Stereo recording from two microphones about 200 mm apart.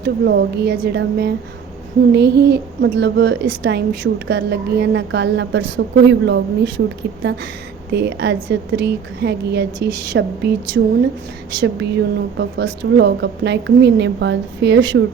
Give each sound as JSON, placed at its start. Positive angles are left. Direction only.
{"t": 0.0, "sound": "a woman's voice", "side_deg": -55}
{"t": 11.6, "sound": "a woman's voice", "side_deg": -60}